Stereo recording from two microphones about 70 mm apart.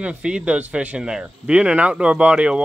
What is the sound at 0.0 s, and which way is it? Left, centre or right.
Speech, centre.